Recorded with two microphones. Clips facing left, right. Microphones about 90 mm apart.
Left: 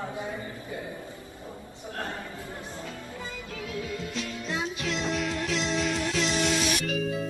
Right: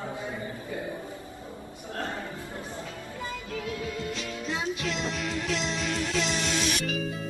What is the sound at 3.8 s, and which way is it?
Music, centre (ahead or behind).